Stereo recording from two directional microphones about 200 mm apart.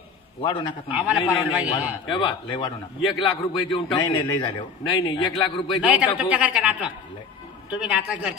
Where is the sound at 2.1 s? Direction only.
25° left (ahead or behind).